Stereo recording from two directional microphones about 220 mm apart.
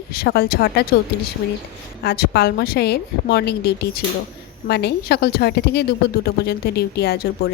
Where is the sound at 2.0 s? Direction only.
45° left (ahead or behind).